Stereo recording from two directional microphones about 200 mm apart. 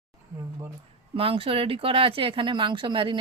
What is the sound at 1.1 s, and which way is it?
Speech, 30° right (ahead or behind).